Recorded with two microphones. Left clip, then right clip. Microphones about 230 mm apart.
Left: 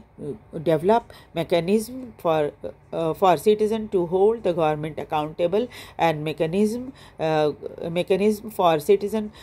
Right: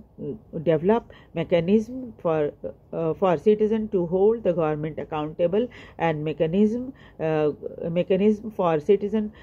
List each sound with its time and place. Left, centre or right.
0.7 s speech: left